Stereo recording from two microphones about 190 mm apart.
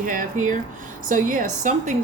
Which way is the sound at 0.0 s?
45° right (ahead or behind).